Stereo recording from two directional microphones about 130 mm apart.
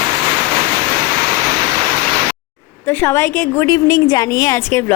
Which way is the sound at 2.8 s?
15° left (ahead or behind).